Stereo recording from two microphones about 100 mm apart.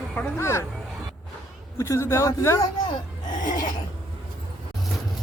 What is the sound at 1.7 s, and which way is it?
Speech, 30° left (ahead or behind).